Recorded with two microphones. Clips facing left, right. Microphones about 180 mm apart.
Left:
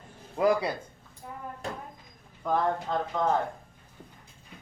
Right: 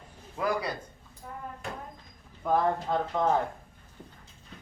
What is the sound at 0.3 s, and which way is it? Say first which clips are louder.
Speech: left 5 dB; 25° left (ahead or behind).